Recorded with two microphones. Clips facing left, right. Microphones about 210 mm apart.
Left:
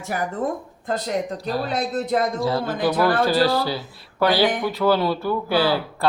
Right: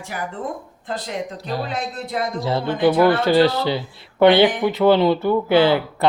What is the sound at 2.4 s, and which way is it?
A man's voice, 25° right (ahead or behind).